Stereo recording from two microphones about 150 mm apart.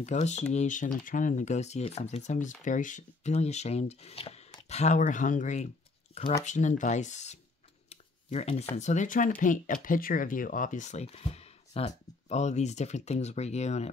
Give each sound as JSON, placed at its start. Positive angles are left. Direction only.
{"t": 0.0, "sound": "speech", "side_deg": 50}
{"t": 7.9, "sound": "shuffling cards", "side_deg": 45}
{"t": 8.7, "sound": "speech", "side_deg": 55}